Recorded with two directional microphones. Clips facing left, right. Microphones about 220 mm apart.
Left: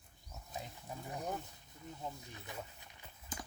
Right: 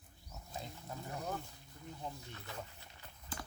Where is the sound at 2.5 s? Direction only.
20° left (ahead or behind).